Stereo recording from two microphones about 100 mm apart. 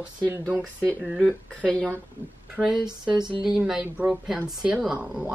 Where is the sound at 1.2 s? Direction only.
10° left (ahead or behind).